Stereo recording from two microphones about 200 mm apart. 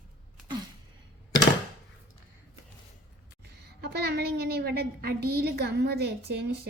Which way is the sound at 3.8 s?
55° right (ahead or behind).